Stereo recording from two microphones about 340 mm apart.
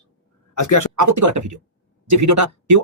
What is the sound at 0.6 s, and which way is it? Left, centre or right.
Speech, left.